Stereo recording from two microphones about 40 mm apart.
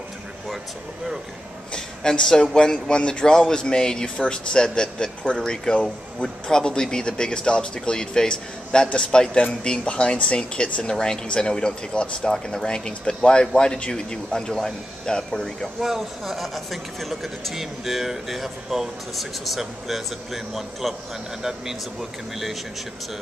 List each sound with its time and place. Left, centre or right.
1.7 s speech: centre
15.8 s speech: centre